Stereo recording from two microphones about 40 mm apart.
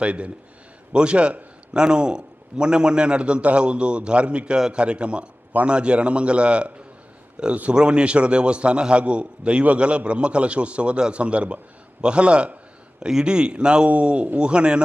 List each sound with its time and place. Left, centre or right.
0.0 s a man's voice: right
7.8 s a man's voice: right